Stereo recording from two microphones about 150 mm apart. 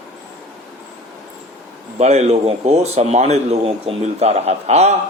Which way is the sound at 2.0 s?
45° right (ahead or behind).